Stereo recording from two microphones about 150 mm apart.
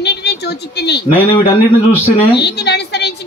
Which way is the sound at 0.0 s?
90° left.